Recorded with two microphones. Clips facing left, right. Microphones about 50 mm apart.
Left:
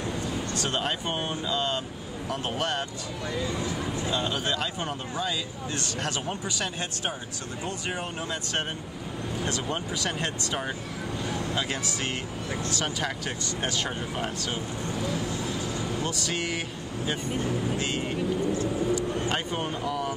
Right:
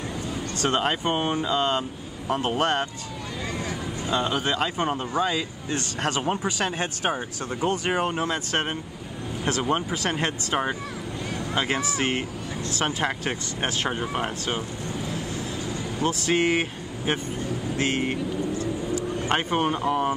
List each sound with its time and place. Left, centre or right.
0.6 s speech: right
3.4 s vehicle: right
4.6 s speech: right
16.0 s speech: right
19.2 s speech: right